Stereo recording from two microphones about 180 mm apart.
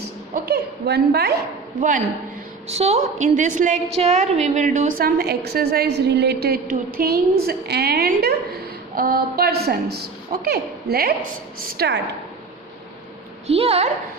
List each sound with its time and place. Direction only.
0.3 s a woman's voice: 60° right (ahead or behind)
2.6 s a woman's voice: 35° right (ahead or behind); by 11.9 s 55° right (ahead or behind)
13.5 s a woman's voice: 35° right (ahead or behind)